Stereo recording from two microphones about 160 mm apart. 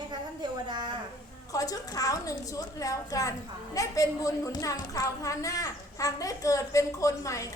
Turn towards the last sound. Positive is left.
turn(degrees=20)  # may be behind; listen again after turning